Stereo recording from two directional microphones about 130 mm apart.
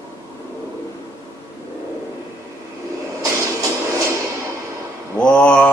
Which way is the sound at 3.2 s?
25° right (ahead or behind).